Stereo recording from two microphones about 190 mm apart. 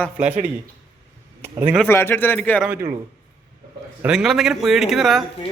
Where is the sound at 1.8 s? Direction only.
10° left (ahead or behind).